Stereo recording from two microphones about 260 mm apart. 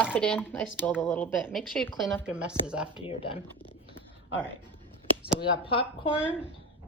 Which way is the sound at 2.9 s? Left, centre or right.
Centre.